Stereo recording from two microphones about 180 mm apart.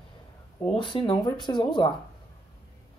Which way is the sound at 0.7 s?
30° left (ahead or behind).